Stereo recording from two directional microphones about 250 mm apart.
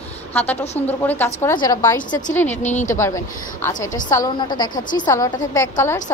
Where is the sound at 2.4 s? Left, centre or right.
Left.